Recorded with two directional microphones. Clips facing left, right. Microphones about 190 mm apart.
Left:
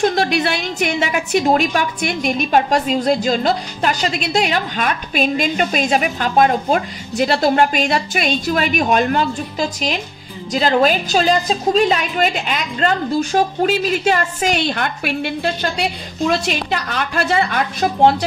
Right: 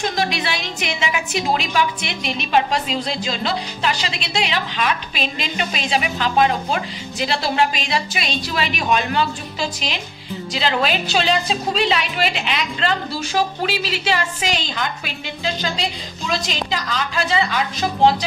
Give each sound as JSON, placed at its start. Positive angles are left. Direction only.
{"t": 0.2, "sound": "a woman's voice", "side_deg": 45}
{"t": 14.6, "sound": "a woman's voice", "side_deg": 60}